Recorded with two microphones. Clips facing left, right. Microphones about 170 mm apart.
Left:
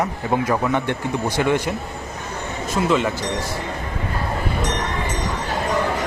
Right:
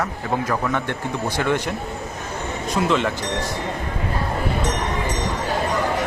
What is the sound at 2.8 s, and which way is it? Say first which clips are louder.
Speech: left 1 dB; 5° left (ahead or behind).